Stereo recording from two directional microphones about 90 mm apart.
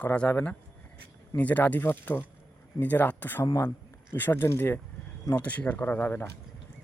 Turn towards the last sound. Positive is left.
turn(degrees=20)  # may be behind; listen again after turning